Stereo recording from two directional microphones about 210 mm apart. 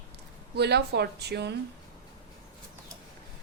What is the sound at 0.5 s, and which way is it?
Speech, 50° right (ahead or behind).